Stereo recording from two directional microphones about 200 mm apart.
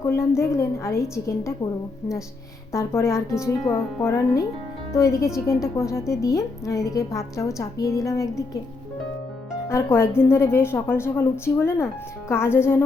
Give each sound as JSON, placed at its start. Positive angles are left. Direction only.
{"t": 0.0, "sound": "a woman's voice", "side_deg": 15}
{"t": 2.7, "sound": "a woman's voice", "side_deg": 15}
{"t": 9.6, "sound": "a woman's voice", "side_deg": 10}